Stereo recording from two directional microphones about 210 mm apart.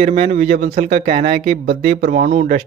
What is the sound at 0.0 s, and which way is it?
Speech, 35° right (ahead or behind).